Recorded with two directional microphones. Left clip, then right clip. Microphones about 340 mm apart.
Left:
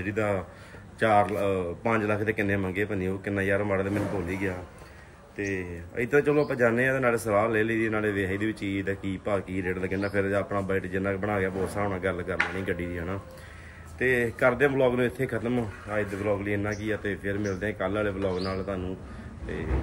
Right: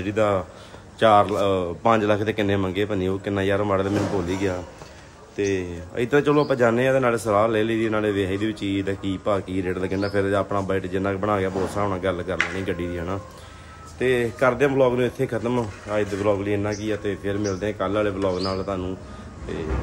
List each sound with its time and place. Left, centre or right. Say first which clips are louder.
0.0 s speech: right 7 dB; centre